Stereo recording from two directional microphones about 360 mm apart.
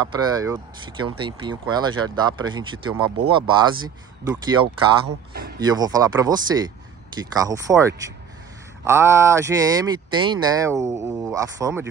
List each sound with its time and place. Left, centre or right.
0.0 s speech: centre
5.0 s a man's voice: right
5.6 s speech: centre